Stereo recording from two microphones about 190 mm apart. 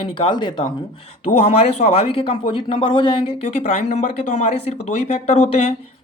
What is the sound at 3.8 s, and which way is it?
Speech, 40° left (ahead or behind).